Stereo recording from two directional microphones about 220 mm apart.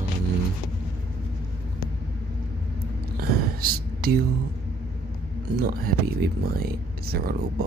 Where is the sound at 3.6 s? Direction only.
45° right (ahead or behind).